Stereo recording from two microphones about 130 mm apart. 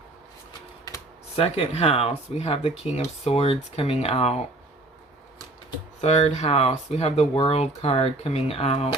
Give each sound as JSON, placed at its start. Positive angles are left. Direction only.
{"t": 1.4, "sound": "speech", "side_deg": 50}
{"t": 6.0, "sound": "speech", "side_deg": 60}